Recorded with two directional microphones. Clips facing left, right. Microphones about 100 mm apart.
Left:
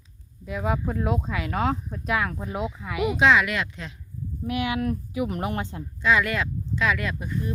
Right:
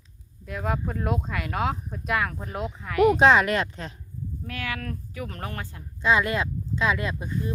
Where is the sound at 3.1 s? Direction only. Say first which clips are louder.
Right 2 dB; 40° right (ahead or behind).